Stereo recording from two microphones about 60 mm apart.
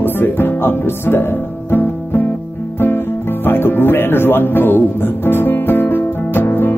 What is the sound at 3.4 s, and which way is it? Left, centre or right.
Music, left.